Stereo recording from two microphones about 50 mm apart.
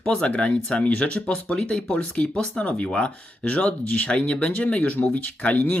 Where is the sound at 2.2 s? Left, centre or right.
Centre.